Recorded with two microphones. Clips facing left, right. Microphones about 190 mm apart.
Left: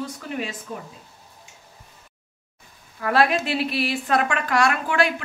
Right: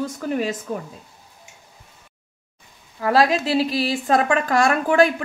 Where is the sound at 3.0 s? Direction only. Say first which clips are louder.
Right 2 dB; 35° right (ahead or behind).